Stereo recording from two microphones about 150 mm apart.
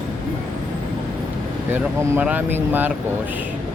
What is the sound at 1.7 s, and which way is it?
Speech, 10° right (ahead or behind).